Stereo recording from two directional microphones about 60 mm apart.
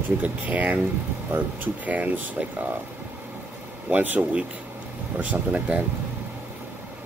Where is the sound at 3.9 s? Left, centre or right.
Right.